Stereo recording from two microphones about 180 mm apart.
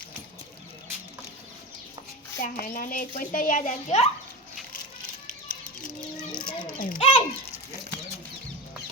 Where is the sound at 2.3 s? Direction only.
50° left (ahead or behind).